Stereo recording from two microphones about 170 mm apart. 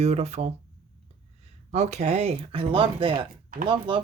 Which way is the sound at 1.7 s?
40° right (ahead or behind).